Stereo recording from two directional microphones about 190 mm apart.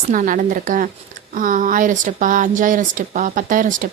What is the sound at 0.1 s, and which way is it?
A woman's voice, 45° right (ahead or behind).